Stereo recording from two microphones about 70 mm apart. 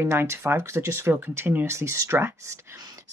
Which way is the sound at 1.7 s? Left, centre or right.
Right.